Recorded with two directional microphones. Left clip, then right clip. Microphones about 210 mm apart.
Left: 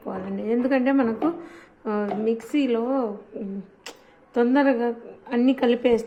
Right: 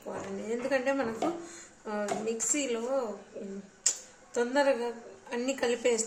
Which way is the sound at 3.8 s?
30° left (ahead or behind).